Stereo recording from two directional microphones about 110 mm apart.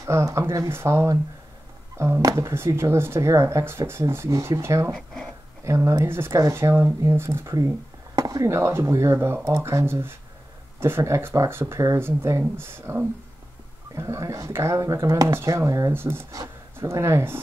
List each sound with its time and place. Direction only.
0.0 s speech: 30° right (ahead or behind)
4.9 s speech: 5° left (ahead or behind)
5.7 s speech: 25° right (ahead or behind)